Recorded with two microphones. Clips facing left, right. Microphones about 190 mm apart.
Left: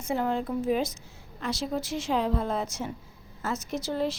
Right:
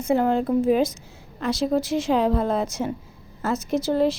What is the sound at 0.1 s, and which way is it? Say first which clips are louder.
Speech: right 8 dB; 70° right (ahead or behind).